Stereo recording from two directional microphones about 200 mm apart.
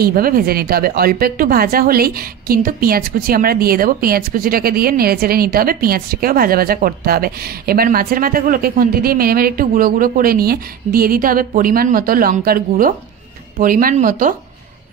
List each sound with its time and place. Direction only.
0.0 s a woman's voice: 45° right (ahead or behind)